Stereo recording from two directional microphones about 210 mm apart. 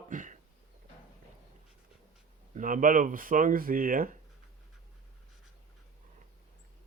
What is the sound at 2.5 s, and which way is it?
Speech, 40° right (ahead or behind).